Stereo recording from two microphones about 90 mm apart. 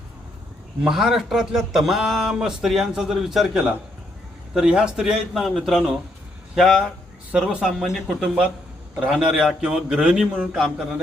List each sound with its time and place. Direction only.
0.9 s a man's voice: 5° right (ahead or behind)